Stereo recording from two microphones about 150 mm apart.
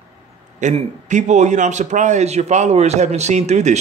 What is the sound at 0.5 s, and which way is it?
A man's voice, 55° right (ahead or behind).